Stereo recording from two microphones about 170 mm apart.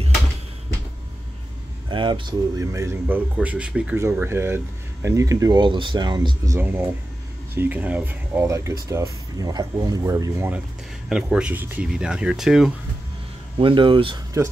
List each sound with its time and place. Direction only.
1.9 s speech: 30° right (ahead or behind)
11.1 s speech: 5° right (ahead or behind)
13.6 s speech: 30° right (ahead or behind)